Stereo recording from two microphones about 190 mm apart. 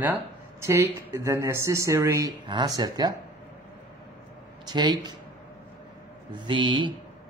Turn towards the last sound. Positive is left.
turn(degrees=-25)  # may be behind; listen again after turning